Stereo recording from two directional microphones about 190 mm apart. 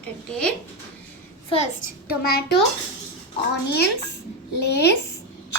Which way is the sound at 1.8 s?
55° left (ahead or behind).